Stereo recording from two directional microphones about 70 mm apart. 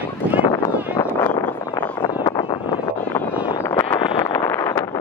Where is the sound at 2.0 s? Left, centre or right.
Left.